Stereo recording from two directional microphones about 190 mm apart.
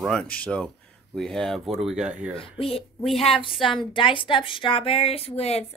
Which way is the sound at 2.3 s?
30° left (ahead or behind).